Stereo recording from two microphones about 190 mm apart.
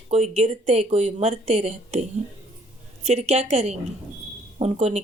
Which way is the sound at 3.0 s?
35° right (ahead or behind).